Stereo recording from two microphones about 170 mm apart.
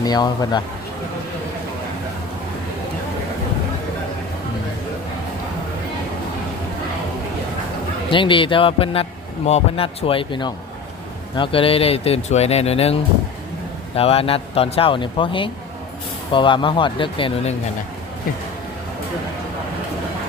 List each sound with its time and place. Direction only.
0.0 s speech: 25° left (ahead or behind)
8.1 s speech: 30° left (ahead or behind)